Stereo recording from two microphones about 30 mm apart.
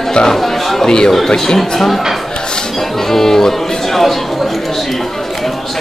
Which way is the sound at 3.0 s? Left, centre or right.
Centre.